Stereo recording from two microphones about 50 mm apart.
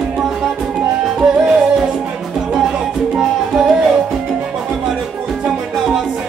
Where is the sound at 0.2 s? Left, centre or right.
Centre.